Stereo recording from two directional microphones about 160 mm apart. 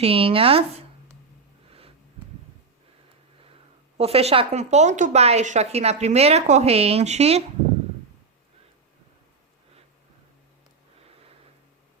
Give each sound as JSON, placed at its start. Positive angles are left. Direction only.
{"t": 0.0, "sound": "a woman's voice", "side_deg": -35}
{"t": 3.9, "sound": "a woman's voice", "side_deg": -40}